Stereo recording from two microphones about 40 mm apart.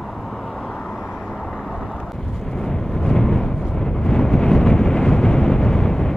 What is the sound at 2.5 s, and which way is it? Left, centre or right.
Vehicle, centre.